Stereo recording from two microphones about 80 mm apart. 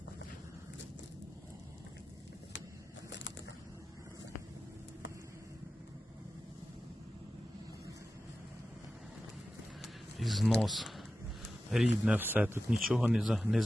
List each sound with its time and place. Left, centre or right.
9.8 s a sound: centre
11.7 s speech: centre
12.1 s speech: right
12.7 s speech: centre